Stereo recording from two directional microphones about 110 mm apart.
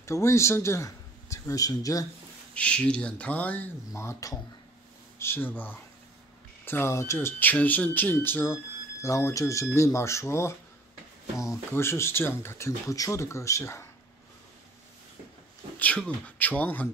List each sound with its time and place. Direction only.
0.0 s speech: 25° left (ahead or behind)
2.5 s speech: 10° left (ahead or behind)
3.9 s speech: 25° left (ahead or behind)
15.8 s speech: 10° left (ahead or behind)